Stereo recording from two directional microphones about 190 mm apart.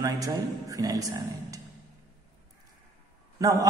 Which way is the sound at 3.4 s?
20° right (ahead or behind).